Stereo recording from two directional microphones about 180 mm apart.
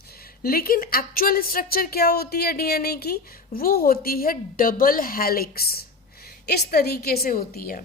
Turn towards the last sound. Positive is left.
turn(degrees=55)  # may be behind; listen again after turning